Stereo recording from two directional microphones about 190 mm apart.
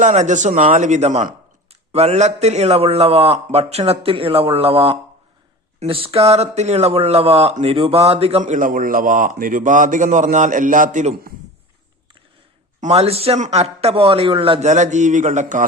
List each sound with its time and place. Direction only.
0.0 s speech: 40° right (ahead or behind)
12.8 s speech: 35° right (ahead or behind)